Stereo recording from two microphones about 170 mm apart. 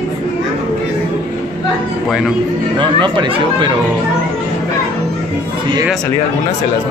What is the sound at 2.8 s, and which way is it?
Speech, 30° right (ahead or behind).